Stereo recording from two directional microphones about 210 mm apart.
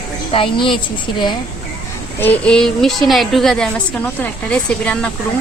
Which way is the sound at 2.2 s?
5° left (ahead or behind).